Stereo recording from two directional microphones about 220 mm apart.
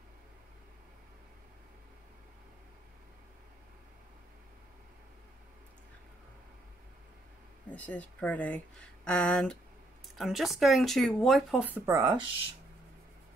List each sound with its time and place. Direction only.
7.7 s speech: 5° left (ahead or behind); by 12.3 s 15° right (ahead or behind)